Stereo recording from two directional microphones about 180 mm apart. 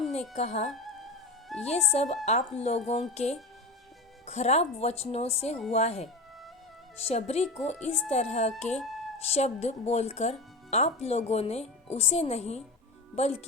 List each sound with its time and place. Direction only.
0.3 s speech: 40° left (ahead or behind)